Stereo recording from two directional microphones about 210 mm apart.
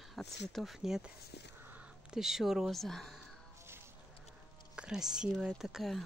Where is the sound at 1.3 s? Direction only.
55° left (ahead or behind).